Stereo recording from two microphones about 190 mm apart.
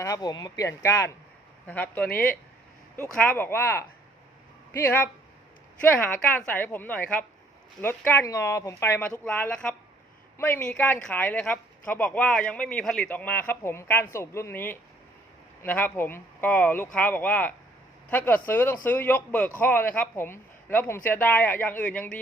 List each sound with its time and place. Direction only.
0.0 s speech: 20° left (ahead or behind)
2.0 s speech: 50° left (ahead or behind)
2.9 s speech: 10° left (ahead or behind)